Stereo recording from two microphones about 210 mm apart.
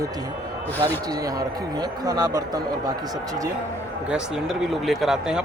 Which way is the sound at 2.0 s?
20° right (ahead or behind).